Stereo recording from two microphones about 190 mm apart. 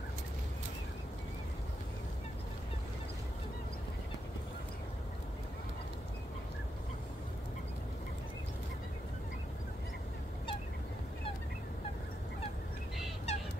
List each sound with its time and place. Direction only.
13.3 s fowl: 35° left (ahead or behind)